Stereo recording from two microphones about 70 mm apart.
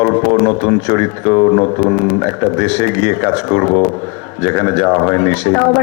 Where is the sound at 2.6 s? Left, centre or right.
Centre.